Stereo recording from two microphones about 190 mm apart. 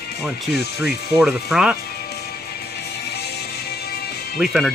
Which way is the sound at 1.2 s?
5° right (ahead or behind).